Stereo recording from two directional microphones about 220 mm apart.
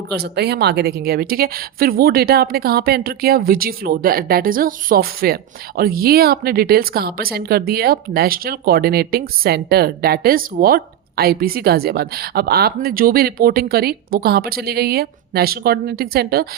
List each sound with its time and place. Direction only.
0.1 s a woman's voice: 50° right (ahead or behind)